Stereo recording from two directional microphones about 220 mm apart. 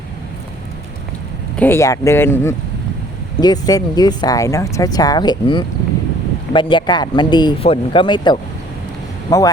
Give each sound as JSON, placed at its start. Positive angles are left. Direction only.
{"t": 1.5, "sound": "speech", "side_deg": 10}